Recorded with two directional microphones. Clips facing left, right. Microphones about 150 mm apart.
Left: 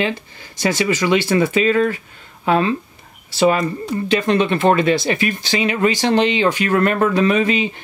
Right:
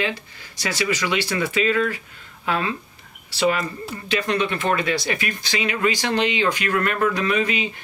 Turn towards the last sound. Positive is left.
turn(degrees=30)  # may be behind; listen again after turning